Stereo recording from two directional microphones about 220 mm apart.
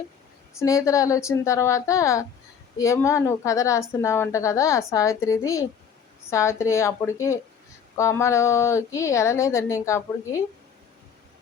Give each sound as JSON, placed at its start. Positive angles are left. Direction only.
{"t": 0.6, "sound": "a woman's voice", "side_deg": 15}